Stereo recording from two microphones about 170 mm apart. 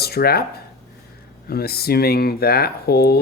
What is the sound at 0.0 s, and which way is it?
Speech, 65° left (ahead or behind).